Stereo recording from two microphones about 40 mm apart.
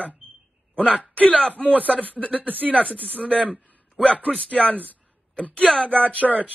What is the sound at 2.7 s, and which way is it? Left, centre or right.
A man's voice, left.